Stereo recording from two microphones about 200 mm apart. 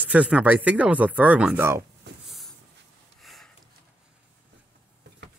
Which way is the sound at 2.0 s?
60° right (ahead or behind).